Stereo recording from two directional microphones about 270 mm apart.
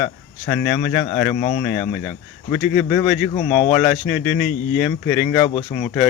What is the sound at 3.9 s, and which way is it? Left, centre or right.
A man's voice, centre.